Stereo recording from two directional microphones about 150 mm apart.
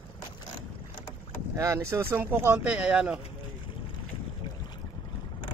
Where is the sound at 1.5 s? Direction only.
20° right (ahead or behind).